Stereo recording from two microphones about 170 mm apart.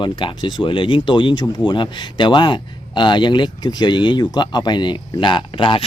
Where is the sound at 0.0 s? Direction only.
30° left (ahead or behind).